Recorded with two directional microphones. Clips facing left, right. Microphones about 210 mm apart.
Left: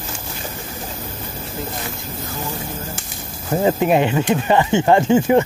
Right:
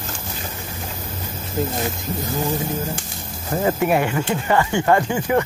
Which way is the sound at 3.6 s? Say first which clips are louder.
Left 3 dB; 20° left (ahead or behind).